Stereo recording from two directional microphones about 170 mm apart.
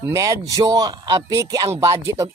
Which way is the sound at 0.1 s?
20° right (ahead or behind).